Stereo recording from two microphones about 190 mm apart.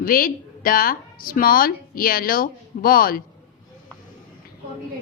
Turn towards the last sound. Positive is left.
turn(degrees=50)  # may be behind; listen again after turning